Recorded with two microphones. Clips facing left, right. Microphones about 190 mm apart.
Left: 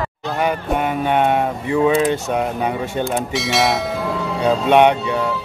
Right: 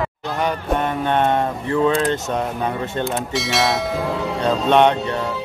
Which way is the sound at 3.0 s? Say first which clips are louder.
Left 2 dB; centre (ahead or behind).